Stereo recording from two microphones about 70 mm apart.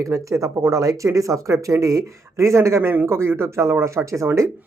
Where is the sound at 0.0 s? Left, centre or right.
Right.